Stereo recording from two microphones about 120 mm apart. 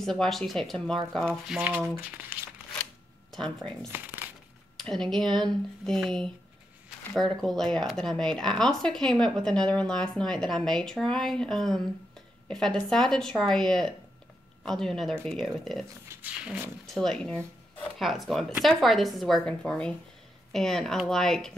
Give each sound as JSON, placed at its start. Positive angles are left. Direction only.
{"t": 0.0, "sound": "speech", "side_deg": 5}
{"t": 2.0, "sound": "speech", "side_deg": -15}
{"t": 3.3, "sound": "speech", "side_deg": 5}
{"t": 3.9, "sound": "crumpling", "side_deg": -15}
{"t": 4.7, "sound": "speech", "side_deg": 5}
{"t": 16.1, "sound": "speech", "side_deg": -15}
{"t": 16.8, "sound": "speech", "side_deg": 5}